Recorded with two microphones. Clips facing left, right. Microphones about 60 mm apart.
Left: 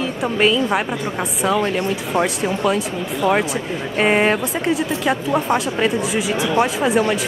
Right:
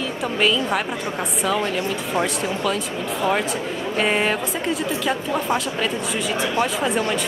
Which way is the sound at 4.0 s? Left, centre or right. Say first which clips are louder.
Left 5 dB; left.